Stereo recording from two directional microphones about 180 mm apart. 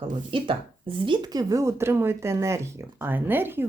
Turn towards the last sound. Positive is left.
turn(degrees=-10)  # may be behind; listen again after turning